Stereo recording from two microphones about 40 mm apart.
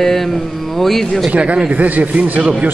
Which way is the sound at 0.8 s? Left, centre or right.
Centre.